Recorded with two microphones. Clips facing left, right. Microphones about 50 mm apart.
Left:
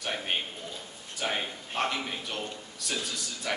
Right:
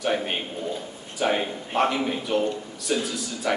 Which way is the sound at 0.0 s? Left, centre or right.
Centre.